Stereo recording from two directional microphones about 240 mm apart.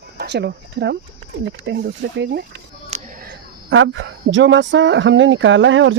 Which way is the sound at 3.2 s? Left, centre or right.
Right.